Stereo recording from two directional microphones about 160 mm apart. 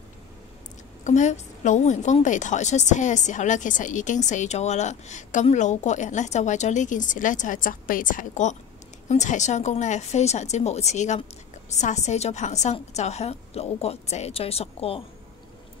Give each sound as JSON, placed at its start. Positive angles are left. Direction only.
{"t": 1.0, "sound": "a woman's voice", "side_deg": 50}